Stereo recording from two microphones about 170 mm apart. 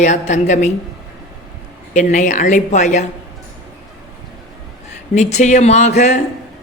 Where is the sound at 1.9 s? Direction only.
45° left (ahead or behind).